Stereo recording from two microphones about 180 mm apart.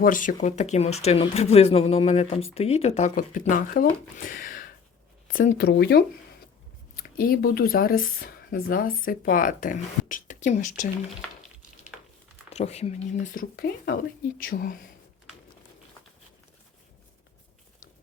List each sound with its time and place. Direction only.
0.0 s speech: 45° left (ahead or behind)
4.2 s a sound: 50° left (ahead or behind)
5.3 s speech: 50° left (ahead or behind); by 6.1 s 65° left (ahead or behind)
6.9 s speech: 55° left (ahead or behind)
12.5 s speech: 35° left (ahead or behind)